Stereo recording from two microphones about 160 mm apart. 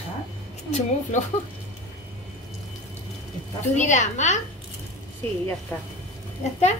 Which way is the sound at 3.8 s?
50° left (ahead or behind).